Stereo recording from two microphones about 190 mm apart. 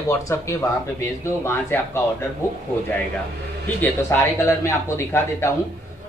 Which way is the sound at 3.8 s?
15° left (ahead or behind).